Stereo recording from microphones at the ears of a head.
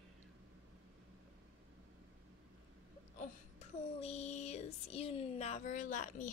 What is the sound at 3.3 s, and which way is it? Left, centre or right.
Child singing, left.